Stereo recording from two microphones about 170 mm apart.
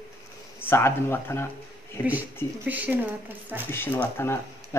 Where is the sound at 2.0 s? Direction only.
10° right (ahead or behind).